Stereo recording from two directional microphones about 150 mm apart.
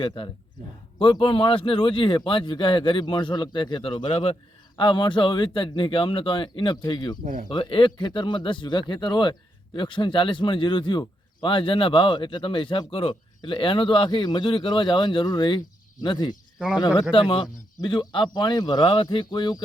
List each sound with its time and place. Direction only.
0.0 s speech: 30° left (ahead or behind)
16.6 s speech: 5° right (ahead or behind)
17.0 s speech: 35° left (ahead or behind)